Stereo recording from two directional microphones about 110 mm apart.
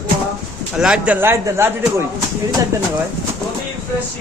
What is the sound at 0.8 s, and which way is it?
Speech, 10° right (ahead or behind).